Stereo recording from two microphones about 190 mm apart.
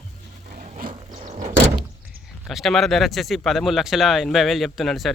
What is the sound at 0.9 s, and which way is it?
Door, 35° right (ahead or behind).